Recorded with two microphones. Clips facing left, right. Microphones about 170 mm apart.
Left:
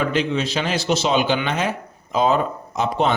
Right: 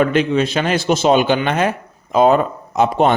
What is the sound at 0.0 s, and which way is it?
A man's voice, 55° right (ahead or behind).